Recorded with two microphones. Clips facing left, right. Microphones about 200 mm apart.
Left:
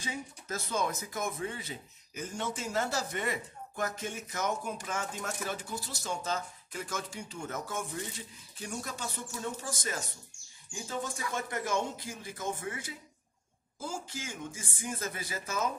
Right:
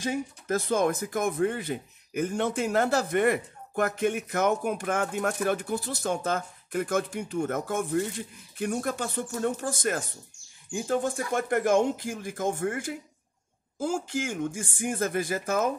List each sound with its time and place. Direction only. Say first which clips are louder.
0.1 s speech: right 10 dB; 55° right (ahead or behind)